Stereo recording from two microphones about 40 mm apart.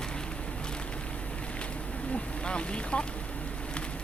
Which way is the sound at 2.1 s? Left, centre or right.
Left.